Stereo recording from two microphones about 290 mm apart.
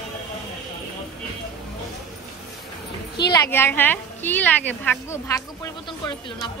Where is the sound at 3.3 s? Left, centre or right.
Centre.